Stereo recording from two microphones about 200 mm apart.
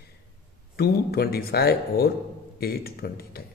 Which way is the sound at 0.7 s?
50° left (ahead or behind).